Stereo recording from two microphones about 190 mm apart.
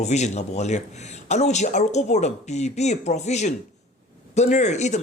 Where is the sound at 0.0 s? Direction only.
35° left (ahead or behind).